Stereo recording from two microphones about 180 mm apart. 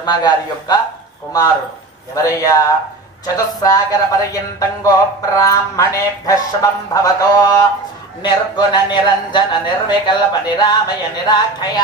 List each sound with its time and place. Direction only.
0.0 s speech: 25° left (ahead or behind)
2.1 s speech: 20° left (ahead or behind)